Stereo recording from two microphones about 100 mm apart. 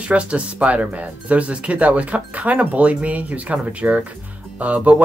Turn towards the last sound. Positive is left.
turn(degrees=-15)  # may be behind; listen again after turning